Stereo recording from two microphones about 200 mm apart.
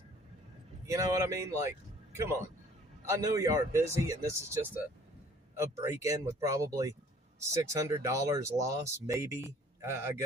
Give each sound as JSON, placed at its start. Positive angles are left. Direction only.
{"t": 0.9, "sound": "speech", "side_deg": -15}
{"t": 3.1, "sound": "speech", "side_deg": -15}